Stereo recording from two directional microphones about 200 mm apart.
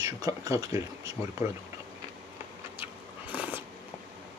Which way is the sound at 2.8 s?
10° right (ahead or behind).